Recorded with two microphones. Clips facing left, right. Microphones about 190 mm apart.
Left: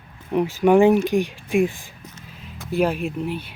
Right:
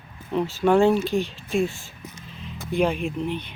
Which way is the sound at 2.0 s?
10° right (ahead or behind).